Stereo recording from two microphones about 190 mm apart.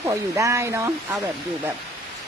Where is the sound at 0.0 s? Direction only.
15° right (ahead or behind).